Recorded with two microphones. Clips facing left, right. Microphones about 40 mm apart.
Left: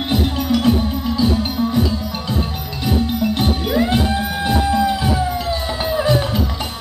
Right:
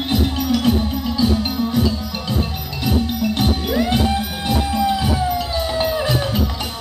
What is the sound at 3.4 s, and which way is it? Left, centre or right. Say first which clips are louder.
Music: even; centre.